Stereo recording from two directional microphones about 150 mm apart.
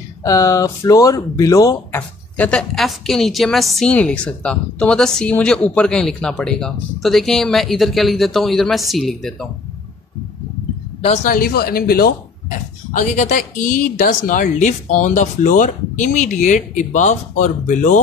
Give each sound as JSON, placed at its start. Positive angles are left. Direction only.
{"t": 0.2, "sound": "speech", "side_deg": 20}
{"t": 1.9, "sound": "a woman's voice", "side_deg": 10}
{"t": 11.2, "sound": "speech", "side_deg": 75}
{"t": 12.9, "sound": "speech", "side_deg": 55}